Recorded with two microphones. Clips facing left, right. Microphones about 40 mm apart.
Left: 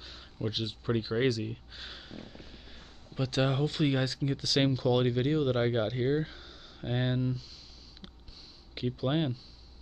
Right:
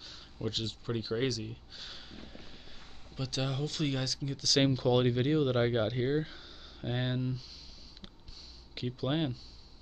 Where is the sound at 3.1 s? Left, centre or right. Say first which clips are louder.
Left 6 dB; left.